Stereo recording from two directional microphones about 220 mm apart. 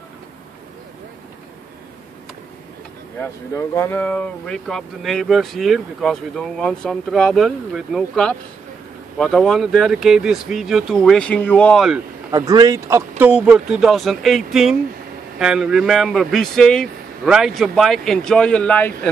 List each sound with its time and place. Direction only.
3.2 s speech: 15° left (ahead or behind)
12.3 s speech: 15° right (ahead or behind); by 18.9 s 5° left (ahead or behind)